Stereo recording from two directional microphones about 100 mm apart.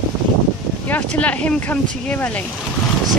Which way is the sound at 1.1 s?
15° left (ahead or behind).